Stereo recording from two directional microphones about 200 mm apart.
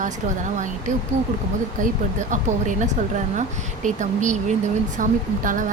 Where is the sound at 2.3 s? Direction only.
40° right (ahead or behind).